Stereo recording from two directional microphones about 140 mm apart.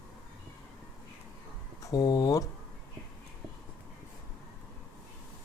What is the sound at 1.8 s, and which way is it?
Speech, 25° left (ahead or behind).